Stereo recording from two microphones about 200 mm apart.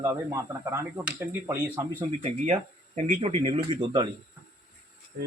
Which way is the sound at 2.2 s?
35° right (ahead or behind).